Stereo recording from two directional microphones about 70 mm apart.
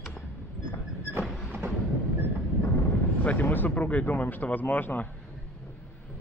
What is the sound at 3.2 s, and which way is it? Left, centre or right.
Speech, left.